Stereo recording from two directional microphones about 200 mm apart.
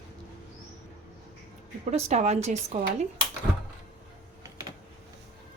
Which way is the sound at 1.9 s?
35° right (ahead or behind).